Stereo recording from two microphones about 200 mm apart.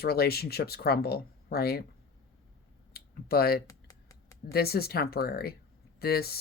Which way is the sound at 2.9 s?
50° left (ahead or behind).